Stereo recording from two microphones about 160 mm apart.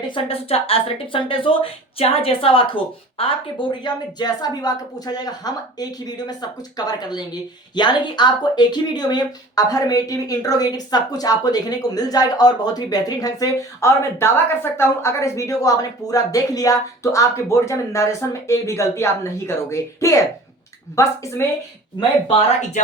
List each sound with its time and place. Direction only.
0.1 s speech: 35° left (ahead or behind); by 21.4 s 20° left (ahead or behind)